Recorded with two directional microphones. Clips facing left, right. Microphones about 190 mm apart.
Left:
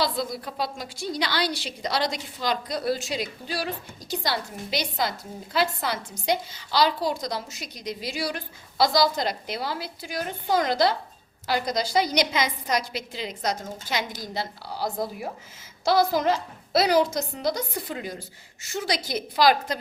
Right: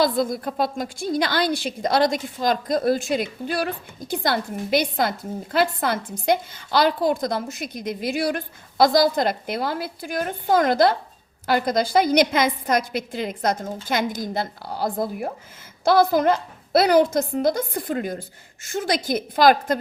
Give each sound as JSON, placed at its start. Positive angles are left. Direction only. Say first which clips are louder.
{"t": 0.0, "sound": "a woman's voice", "louder": "right 6 dB", "side_deg": -50}